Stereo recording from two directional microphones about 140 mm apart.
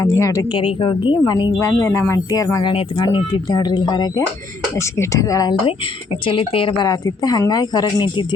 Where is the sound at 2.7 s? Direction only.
35° left (ahead or behind).